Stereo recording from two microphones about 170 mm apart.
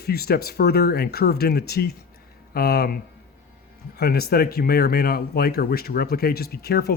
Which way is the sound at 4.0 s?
65° left (ahead or behind).